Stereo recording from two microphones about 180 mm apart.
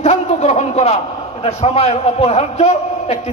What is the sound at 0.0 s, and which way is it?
A man's voice, 40° left (ahead or behind).